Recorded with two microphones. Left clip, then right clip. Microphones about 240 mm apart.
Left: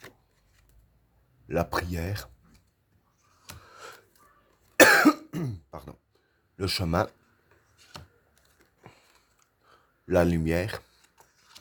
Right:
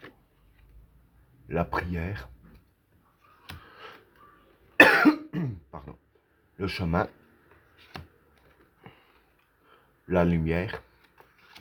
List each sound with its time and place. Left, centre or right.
1.5 s speech: left
4.8 s cough: left
6.6 s speech: left
10.1 s speech: left